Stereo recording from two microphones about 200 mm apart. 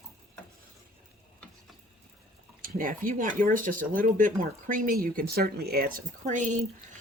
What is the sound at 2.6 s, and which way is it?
Speech, 45° right (ahead or behind).